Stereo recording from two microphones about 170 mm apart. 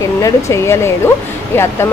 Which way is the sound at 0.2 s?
20° left (ahead or behind).